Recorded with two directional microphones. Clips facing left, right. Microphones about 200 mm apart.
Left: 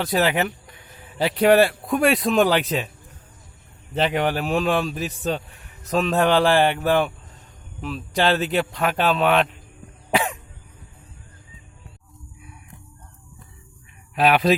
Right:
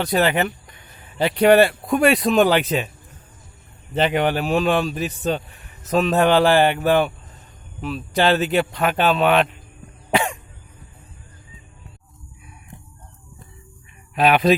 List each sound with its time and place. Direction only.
0.0 s speech: centre (ahead or behind)
3.9 s a man's voice: centre (ahead or behind)
10.1 s cough: centre (ahead or behind)
14.2 s a man's voice: centre (ahead or behind)